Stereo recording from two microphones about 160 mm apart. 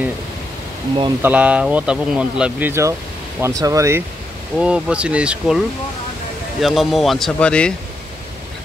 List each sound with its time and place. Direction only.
1.2 s speech: 10° right (ahead or behind)
4.6 s speech: 5° right (ahead or behind)
6.6 s speech: centre (ahead or behind)